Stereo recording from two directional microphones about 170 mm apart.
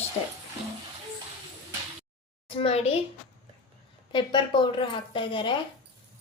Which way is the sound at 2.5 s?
35° left (ahead or behind).